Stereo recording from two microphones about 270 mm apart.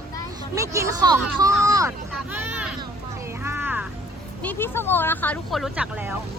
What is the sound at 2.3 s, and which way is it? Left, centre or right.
Vehicle, centre.